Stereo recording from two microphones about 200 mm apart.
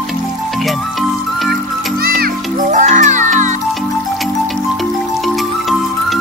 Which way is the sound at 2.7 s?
40° right (ahead or behind).